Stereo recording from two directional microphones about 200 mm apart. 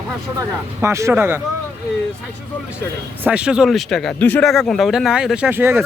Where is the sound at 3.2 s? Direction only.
5° right (ahead or behind).